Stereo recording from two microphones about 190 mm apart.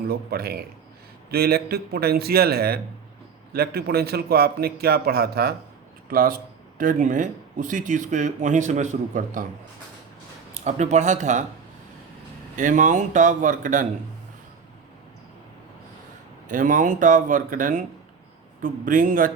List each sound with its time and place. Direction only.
0.1 s a man's voice: 55° right (ahead or behind)
10.5 s a man's voice: 35° right (ahead or behind)
12.5 s speech: 40° right (ahead or behind)
16.5 s speech: 45° right (ahead or behind)